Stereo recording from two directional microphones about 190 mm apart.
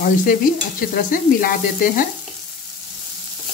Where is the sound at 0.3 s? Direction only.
45° left (ahead or behind).